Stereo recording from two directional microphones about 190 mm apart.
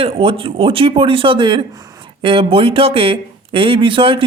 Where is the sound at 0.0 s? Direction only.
30° right (ahead or behind).